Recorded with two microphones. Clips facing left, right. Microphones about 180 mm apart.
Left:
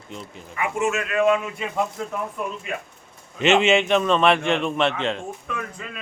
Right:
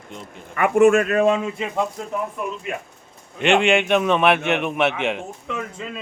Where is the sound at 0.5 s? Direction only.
60° right (ahead or behind); by 1.6 s 30° right (ahead or behind).